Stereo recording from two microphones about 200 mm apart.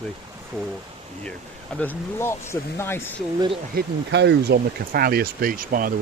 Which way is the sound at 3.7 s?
60° right (ahead or behind).